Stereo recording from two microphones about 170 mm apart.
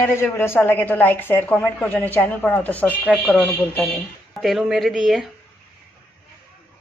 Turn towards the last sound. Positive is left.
turn(degrees=0)  # may be behind; listen again after turning